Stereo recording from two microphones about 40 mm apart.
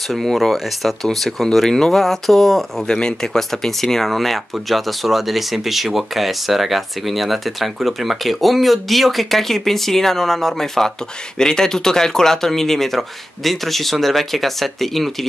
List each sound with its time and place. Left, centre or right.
0.1 s speech: centre
2.9 s speech: centre